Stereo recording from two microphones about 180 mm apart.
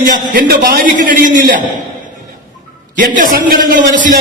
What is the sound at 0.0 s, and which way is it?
A man's voice, 50° right (ahead or behind).